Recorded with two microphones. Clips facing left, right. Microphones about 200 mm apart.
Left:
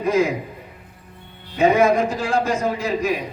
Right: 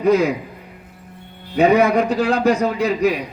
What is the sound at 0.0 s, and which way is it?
Speech, 65° right (ahead or behind).